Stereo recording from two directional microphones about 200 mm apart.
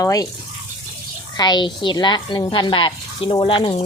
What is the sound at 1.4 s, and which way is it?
A woman's voice, 20° left (ahead or behind).